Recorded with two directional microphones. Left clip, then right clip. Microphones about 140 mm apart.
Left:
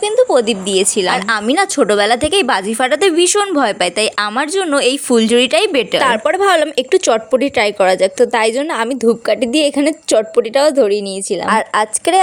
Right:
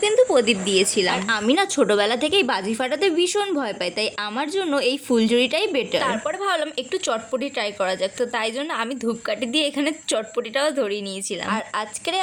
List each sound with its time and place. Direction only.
0.0 s a woman's voice: 30° left (ahead or behind); by 12.2 s 45° left (ahead or behind)